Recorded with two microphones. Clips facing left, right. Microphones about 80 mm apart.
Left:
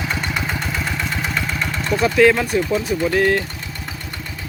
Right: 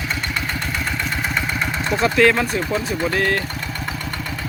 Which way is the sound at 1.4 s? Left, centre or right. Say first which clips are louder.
Right 1 dB; centre.